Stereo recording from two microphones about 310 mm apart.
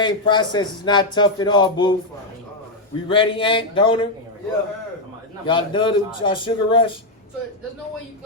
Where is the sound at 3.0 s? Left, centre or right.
Centre.